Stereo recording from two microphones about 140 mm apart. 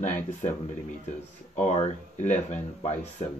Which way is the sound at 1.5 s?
55° left (ahead or behind).